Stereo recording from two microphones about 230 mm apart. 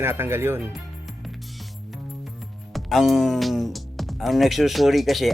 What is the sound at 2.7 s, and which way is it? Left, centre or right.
Speech, centre.